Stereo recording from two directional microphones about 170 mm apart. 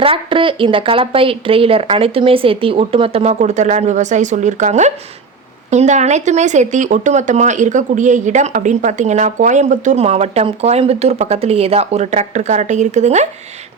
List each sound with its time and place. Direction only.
0.0 s speech: 30° right (ahead or behind)